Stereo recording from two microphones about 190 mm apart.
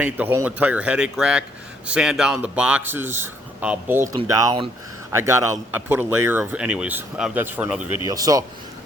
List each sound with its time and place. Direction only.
0.0 s speech: 10° right (ahead or behind)